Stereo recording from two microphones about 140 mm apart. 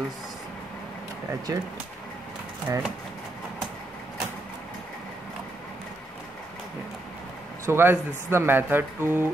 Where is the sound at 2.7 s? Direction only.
20° right (ahead or behind).